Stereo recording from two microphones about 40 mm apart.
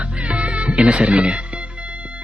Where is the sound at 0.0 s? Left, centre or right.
Right.